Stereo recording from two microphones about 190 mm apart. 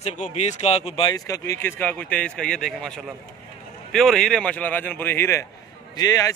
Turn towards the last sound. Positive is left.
turn(degrees=20)  # may be behind; listen again after turning